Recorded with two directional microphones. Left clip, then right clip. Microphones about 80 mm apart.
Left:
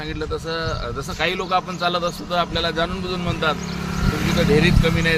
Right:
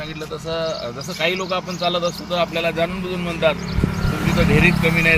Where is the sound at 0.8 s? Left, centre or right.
Left.